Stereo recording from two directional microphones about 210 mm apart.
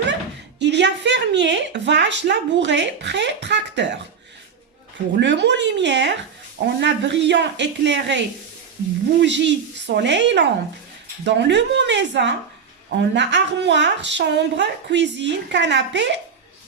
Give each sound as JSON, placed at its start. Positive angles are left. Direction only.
{"t": 0.6, "sound": "speech", "side_deg": -55}
{"t": 5.1, "sound": "speech", "side_deg": -55}
{"t": 9.2, "sound": "speech", "side_deg": -60}